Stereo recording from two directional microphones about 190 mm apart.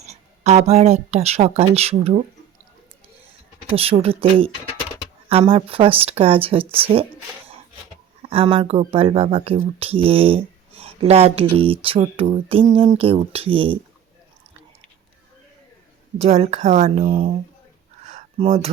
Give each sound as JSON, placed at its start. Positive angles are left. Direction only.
{"t": 0.0, "sound": "speech", "side_deg": -35}
{"t": 3.7, "sound": "speech", "side_deg": -30}
{"t": 8.3, "sound": "speech", "side_deg": -30}
{"t": 16.1, "sound": "speech", "side_deg": -35}
{"t": 18.0, "sound": "a sound", "side_deg": -35}